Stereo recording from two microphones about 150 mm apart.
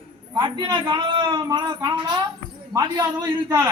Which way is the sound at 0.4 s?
30° right (ahead or behind).